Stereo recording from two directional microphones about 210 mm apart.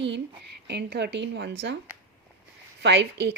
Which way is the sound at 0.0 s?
55° right (ahead or behind).